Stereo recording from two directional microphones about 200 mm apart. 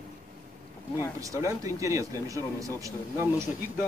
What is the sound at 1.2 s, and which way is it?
Speech, 15° right (ahead or behind).